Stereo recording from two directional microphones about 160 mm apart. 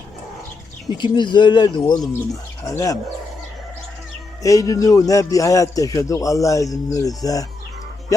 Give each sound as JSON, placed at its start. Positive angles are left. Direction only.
{"t": 0.9, "sound": "a man's voice", "side_deg": 30}
{"t": 4.4, "sound": "a man's voice", "side_deg": 20}